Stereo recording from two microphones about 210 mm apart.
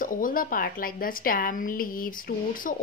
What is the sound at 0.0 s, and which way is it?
A woman's voice, 40° left (ahead or behind).